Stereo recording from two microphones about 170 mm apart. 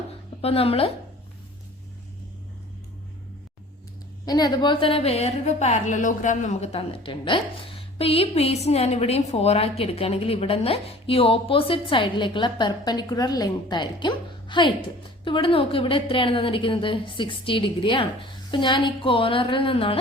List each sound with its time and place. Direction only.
0.4 s a woman's voice: 35° left (ahead or behind)
4.3 s a woman's voice: 25° left (ahead or behind)